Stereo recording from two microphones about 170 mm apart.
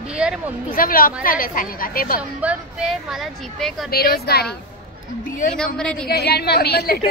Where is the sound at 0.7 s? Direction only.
55° left (ahead or behind).